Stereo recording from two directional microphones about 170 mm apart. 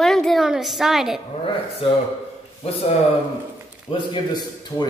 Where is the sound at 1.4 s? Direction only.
35° left (ahead or behind).